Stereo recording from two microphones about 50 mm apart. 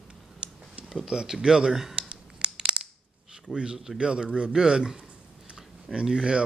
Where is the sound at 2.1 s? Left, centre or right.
Centre.